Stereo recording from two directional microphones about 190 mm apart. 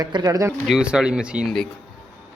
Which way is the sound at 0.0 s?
20° right (ahead or behind).